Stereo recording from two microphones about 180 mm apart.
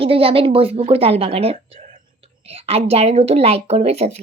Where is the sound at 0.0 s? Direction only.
30° right (ahead or behind).